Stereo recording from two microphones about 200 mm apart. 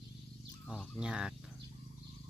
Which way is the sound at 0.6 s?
Centre (ahead or behind).